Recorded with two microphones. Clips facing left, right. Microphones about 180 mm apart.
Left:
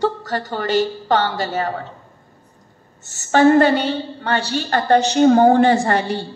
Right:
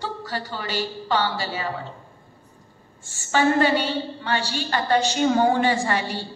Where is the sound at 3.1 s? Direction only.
45° left (ahead or behind).